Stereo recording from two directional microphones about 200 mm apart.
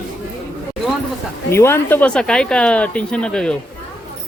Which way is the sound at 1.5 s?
10° left (ahead or behind).